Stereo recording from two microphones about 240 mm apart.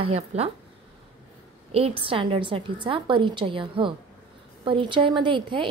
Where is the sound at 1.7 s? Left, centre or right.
Right.